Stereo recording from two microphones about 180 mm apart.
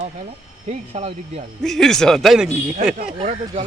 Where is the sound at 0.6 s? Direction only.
35° right (ahead or behind).